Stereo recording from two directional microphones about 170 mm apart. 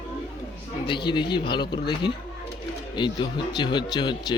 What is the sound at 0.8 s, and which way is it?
Speech, 30° left (ahead or behind).